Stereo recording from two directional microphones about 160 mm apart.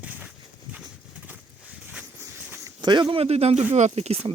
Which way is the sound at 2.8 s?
30° right (ahead or behind).